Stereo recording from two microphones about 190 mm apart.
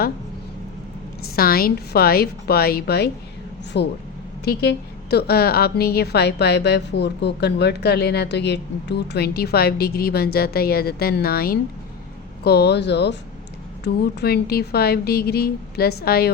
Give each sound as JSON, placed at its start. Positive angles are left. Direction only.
{"t": 1.4, "sound": "a woman's voice", "side_deg": 50}
{"t": 5.1, "sound": "a woman's voice", "side_deg": 55}